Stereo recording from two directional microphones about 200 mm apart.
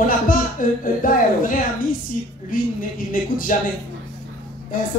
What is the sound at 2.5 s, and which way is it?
A man's voice, 45° left (ahead or behind).